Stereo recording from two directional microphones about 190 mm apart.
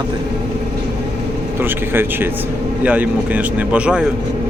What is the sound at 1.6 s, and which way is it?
Speech, 10° right (ahead or behind).